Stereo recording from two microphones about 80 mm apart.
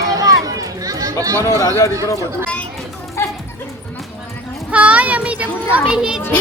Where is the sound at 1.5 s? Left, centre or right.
Left.